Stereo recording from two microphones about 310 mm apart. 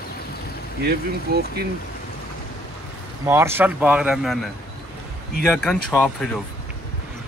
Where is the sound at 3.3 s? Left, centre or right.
Centre.